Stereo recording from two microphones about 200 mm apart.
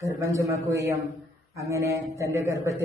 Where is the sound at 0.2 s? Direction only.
15° right (ahead or behind).